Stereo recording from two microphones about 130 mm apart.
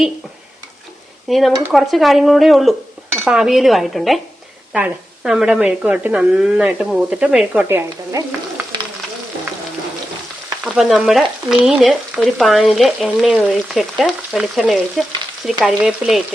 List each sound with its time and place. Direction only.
1.3 s stir: centre (ahead or behind)
4.7 s speech: 5° right (ahead or behind)
10.6 s stir: 5° right (ahead or behind)